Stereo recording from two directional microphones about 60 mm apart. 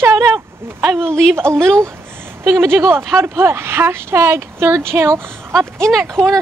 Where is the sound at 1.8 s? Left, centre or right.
Right.